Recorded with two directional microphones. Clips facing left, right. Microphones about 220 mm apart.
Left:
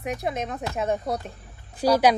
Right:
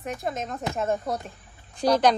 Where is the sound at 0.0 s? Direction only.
10° left (ahead or behind).